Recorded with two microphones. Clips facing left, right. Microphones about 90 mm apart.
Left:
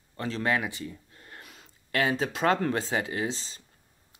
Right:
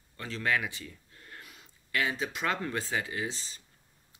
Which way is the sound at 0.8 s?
30° left (ahead or behind).